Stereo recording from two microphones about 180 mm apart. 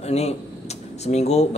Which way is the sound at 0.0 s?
35° left (ahead or behind).